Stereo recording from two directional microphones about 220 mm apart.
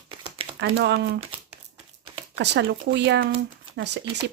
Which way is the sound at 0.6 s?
50° right (ahead or behind).